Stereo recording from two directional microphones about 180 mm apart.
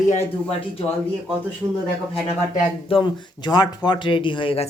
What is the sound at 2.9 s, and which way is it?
Speech, 25° left (ahead or behind).